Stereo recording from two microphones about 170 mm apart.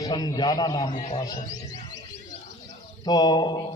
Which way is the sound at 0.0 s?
20° left (ahead or behind).